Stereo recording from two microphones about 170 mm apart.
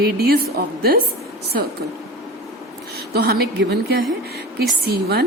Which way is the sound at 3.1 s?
75° right (ahead or behind).